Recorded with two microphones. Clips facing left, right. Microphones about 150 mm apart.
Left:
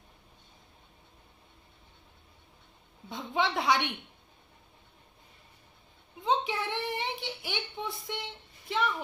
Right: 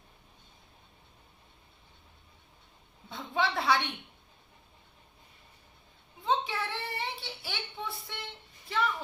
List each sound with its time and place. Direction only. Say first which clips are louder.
3.1 s a woman's voice: left 1 dB; 20° left (ahead or behind)
6.2 s child singing: left 1 dB; 20° left (ahead or behind)
8.7 s a sound: left 1 dB; 20° left (ahead or behind)